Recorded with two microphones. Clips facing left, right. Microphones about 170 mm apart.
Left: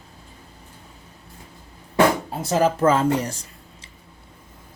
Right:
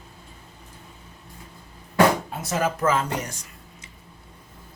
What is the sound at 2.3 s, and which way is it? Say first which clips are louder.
Speech: left 5 dB; 30° left (ahead or behind).